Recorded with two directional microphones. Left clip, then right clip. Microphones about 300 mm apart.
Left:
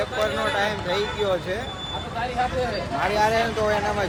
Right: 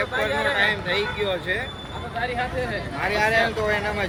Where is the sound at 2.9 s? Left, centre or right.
Centre.